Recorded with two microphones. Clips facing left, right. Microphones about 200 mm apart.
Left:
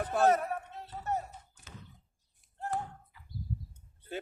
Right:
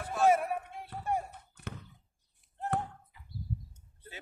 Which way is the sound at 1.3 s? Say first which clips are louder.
Right 7 dB; 60° right (ahead or behind).